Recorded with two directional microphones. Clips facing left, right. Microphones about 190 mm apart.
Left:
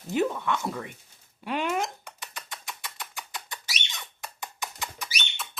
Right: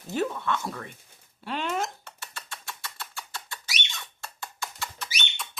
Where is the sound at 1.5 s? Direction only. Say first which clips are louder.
Left 2 dB; 10° left (ahead or behind).